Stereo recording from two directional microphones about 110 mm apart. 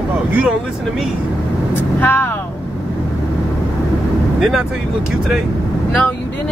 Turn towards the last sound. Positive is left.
turn(degrees=-5)  # may be behind; listen again after turning